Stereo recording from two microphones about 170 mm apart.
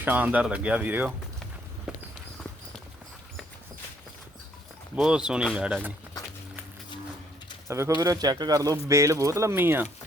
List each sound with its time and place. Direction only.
0.0 s speech: 10° right (ahead or behind)
4.9 s speech: 5° right (ahead or behind)
7.7 s speech: 15° right (ahead or behind)